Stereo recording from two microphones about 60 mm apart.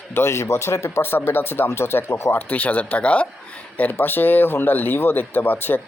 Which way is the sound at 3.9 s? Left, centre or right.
Left.